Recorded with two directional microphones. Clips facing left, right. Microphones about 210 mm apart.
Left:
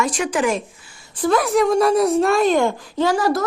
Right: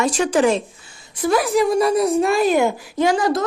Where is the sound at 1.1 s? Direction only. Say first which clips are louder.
Even; centre (ahead or behind).